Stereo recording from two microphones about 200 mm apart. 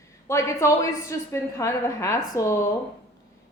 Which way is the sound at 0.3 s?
15° left (ahead or behind).